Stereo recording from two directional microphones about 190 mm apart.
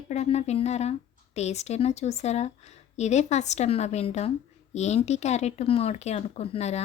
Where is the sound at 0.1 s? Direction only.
35° left (ahead or behind).